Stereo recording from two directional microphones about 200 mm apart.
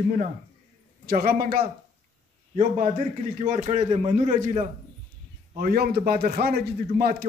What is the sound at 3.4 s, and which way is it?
A man's voice, 40° right (ahead or behind).